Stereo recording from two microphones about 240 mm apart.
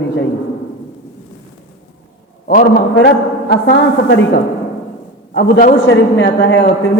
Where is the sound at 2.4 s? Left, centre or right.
Left.